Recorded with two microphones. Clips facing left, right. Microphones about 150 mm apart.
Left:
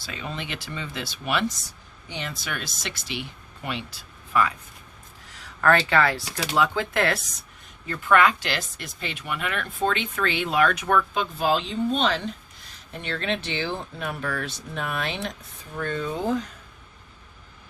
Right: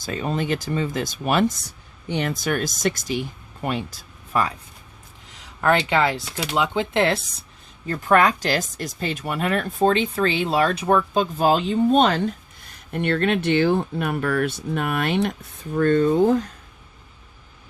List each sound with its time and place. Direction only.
0.0 s speech: 45° right (ahead or behind)
2.0 s speech: 55° right (ahead or behind); by 4.5 s 35° right (ahead or behind)
5.3 s speech: 20° right (ahead or behind)
7.9 s speech: 40° right (ahead or behind); by 16.4 s 55° right (ahead or behind)